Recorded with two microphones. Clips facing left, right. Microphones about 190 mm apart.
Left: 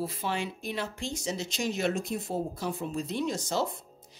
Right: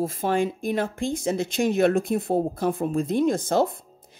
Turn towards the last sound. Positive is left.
turn(degrees=-55)  # may be behind; listen again after turning